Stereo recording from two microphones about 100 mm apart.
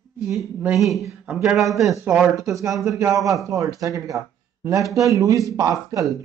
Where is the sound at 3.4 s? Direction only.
35° right (ahead or behind).